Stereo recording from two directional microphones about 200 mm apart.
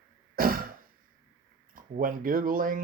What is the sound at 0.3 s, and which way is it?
Throat clearing, 45° right (ahead or behind).